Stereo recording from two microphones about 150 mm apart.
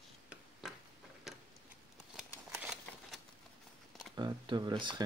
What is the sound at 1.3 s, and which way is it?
Tick-tock, centre (ahead or behind).